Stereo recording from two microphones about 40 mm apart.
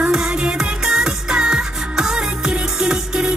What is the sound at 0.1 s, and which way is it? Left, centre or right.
Music, centre.